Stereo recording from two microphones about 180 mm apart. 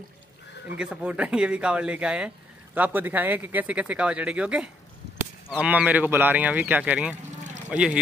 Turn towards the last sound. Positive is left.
turn(degrees=-5)  # may be behind; listen again after turning